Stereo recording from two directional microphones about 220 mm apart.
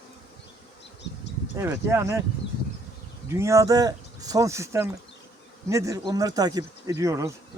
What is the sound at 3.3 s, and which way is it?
Speech, 15° right (ahead or behind).